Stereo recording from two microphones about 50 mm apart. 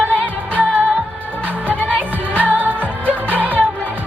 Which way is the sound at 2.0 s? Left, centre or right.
Right.